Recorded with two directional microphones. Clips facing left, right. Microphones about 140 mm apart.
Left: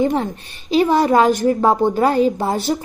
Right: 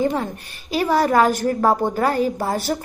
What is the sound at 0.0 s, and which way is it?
A woman's voice, 25° left (ahead or behind).